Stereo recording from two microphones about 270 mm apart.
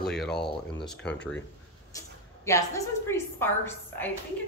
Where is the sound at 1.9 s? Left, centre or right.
Centre.